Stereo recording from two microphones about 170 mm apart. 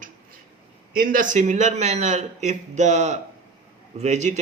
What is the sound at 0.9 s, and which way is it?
A man's voice, 55° right (ahead or behind).